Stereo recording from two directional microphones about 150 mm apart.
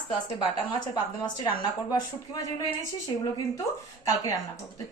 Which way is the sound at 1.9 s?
25° left (ahead or behind).